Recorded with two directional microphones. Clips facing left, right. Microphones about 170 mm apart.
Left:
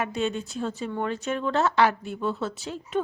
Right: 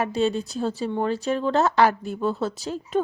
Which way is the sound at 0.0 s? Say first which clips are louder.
Right 4 dB; 35° right (ahead or behind).